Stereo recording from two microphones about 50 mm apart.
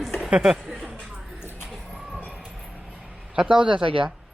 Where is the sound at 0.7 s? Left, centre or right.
Right.